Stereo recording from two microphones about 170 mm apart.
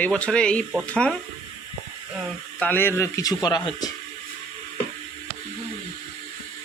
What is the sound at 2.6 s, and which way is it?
Speech, 10° left (ahead or behind).